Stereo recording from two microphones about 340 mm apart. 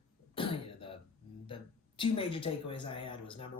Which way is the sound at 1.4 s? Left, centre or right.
Centre.